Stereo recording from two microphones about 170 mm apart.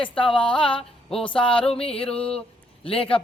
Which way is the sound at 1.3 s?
30° left (ahead or behind).